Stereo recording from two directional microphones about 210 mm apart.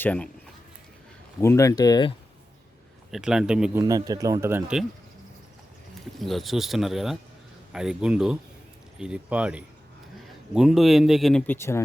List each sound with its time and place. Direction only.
0.0 s speech: 5° left (ahead or behind)
1.4 s speech: 15° left (ahead or behind)
3.1 s speech: 5° right (ahead or behind)
3.8 s speech: 15° right (ahead or behind)
6.1 s speech: centre (ahead or behind)